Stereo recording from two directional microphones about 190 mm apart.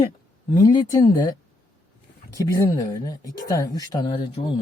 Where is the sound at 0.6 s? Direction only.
20° left (ahead or behind).